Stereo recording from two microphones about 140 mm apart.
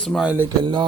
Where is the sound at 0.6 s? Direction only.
35° right (ahead or behind).